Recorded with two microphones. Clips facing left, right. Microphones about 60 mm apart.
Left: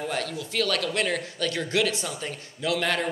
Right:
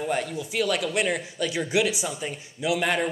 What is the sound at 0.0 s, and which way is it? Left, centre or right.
Speech, centre.